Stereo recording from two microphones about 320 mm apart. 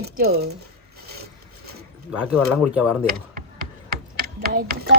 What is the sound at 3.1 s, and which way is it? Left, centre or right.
Typing, right.